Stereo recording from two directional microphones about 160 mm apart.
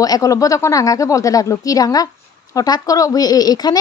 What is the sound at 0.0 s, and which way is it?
Speech, 20° left (ahead or behind).